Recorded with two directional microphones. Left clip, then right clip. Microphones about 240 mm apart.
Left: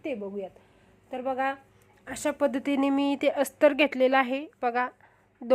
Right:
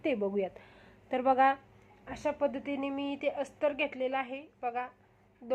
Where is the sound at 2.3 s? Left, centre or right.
Left.